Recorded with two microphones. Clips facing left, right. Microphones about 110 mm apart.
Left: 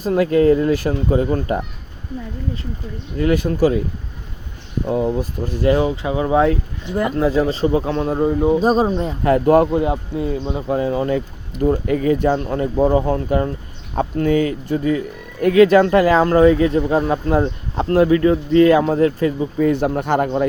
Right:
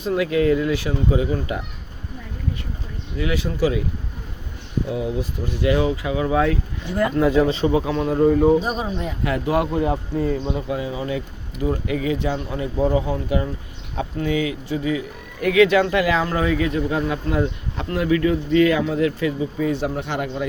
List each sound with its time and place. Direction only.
0.0 s speech: 40° left (ahead or behind)
3.2 s speech: 50° left (ahead or behind)
4.9 s speech: 50° left (ahead or behind); by 7.1 s 20° left (ahead or behind)
7.2 s speech: 35° left (ahead or behind)
8.4 s speech: centre (ahead or behind)
8.6 s speech: 40° left (ahead or behind)
9.7 s speech: 20° left (ahead or behind)
10.7 s speech: 50° left (ahead or behind)